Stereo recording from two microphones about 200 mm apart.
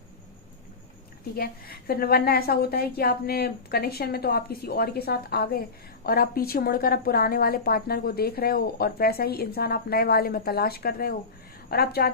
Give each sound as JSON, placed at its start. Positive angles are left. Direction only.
{"t": 1.4, "sound": "a woman's voice", "side_deg": 50}